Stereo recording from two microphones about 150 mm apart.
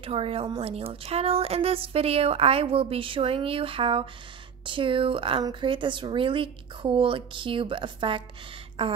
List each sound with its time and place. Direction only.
0.0 s a woman's voice: 40° right (ahead or behind)